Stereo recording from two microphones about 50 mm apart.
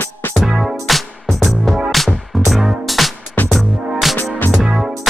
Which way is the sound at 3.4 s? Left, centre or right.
Left.